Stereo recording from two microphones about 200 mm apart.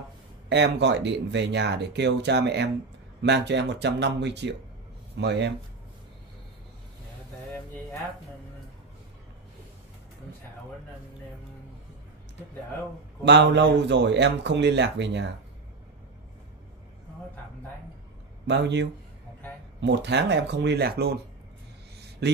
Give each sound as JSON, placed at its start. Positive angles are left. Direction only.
{"t": 0.5, "sound": "speech", "side_deg": -60}
{"t": 13.2, "sound": "speech", "side_deg": -60}
{"t": 18.5, "sound": "speech", "side_deg": -60}